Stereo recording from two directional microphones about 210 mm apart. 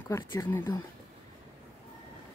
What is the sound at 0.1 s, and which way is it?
Speech, 15° left (ahead or behind).